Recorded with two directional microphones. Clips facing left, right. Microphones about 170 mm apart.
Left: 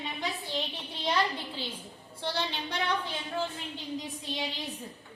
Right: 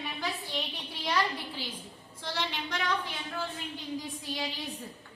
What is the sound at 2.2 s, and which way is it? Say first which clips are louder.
Music: left 2 dB; 30° left (ahead or behind).